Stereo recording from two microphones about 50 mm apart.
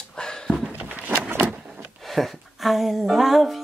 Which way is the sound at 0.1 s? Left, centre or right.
Centre.